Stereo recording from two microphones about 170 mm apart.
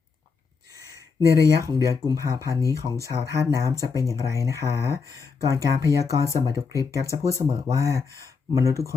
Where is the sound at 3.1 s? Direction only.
30° right (ahead or behind).